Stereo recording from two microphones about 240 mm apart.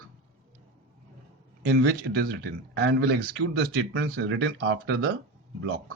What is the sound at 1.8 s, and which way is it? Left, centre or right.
Speech, right.